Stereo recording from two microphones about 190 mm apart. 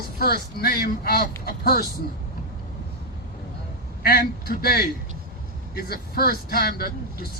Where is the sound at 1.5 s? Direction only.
55° left (ahead or behind).